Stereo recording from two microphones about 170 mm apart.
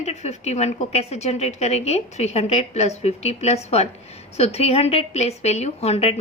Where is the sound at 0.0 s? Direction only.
40° left (ahead or behind).